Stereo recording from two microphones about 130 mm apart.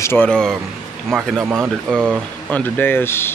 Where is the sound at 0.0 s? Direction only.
20° left (ahead or behind).